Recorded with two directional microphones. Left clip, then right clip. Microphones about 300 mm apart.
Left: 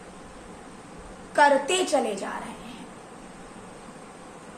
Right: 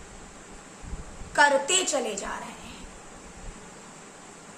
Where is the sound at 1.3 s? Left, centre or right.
Centre.